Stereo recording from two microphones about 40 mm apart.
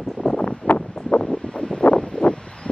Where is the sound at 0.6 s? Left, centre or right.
Left.